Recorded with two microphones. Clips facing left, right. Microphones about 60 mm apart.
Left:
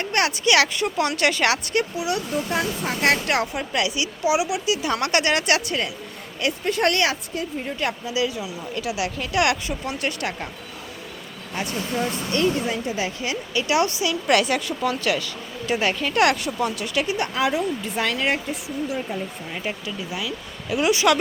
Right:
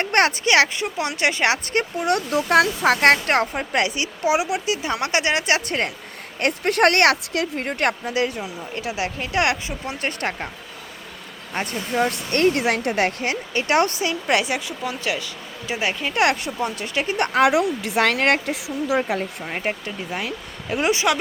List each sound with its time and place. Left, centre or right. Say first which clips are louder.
0.0 s speech: right 3 dB; right
2.0 s speech: right 4 dB; right
2.3 s speech: right 7 dB; right
3.0 s speech: right 1 dB; right
5.6 s speech: right 2 dB; right
6.4 s speech: right 4 dB; right
11.5 s speech: right 3 dB; right
12.1 s speech: right 3 dB; right
14.3 s speech: left 2 dB; centre
17.1 s speech: right 8 dB; right
19.5 s speech: right 3 dB; right